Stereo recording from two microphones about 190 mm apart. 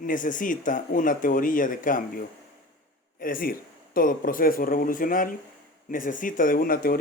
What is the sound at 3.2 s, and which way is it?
Speech, 50° left (ahead or behind).